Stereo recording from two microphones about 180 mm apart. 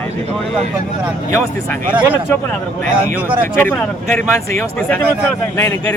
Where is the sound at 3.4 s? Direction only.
10° left (ahead or behind).